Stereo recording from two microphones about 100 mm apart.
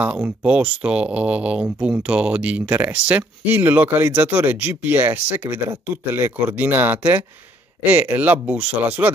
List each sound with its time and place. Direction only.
0.0 s speech: 15° right (ahead or behind)